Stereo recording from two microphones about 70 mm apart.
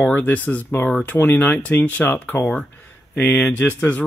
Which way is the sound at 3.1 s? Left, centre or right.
Left.